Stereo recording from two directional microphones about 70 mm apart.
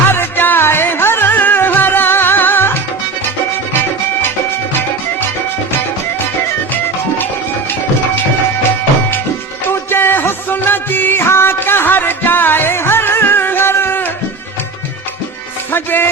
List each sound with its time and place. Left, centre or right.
0.1 s music: left
9.6 s music: left
15.7 s music: left